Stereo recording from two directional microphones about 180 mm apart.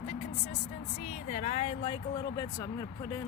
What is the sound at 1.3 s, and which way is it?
Speech, 40° left (ahead or behind).